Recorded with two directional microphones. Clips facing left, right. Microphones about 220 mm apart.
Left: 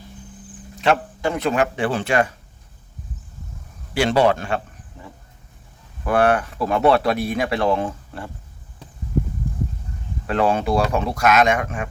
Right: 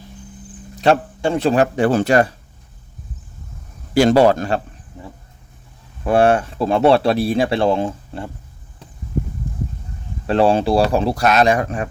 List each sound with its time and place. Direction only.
0.8 s speech: 30° right (ahead or behind)
3.9 s speech: 40° right (ahead or behind)
6.1 s speech: 25° right (ahead or behind)
10.2 s speech: 30° right (ahead or behind)